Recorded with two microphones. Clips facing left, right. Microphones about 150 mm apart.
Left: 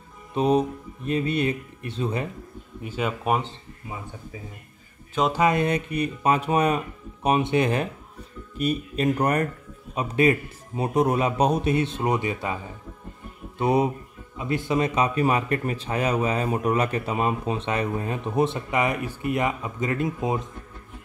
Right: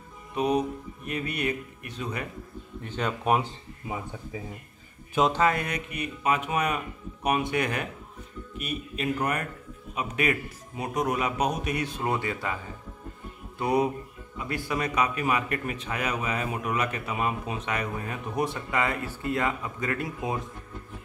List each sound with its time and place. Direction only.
0.3 s speech: 30° left (ahead or behind)
2.8 s speech: 10° left (ahead or behind)
5.3 s speech: 20° left (ahead or behind)
8.5 s speech: 35° left (ahead or behind); by 12.5 s 20° left (ahead or behind)
13.6 s speech: 20° left (ahead or behind)